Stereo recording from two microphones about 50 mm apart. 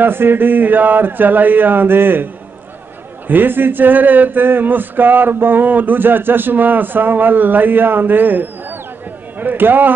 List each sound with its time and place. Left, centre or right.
0.0 s speech: right
3.3 s speech: right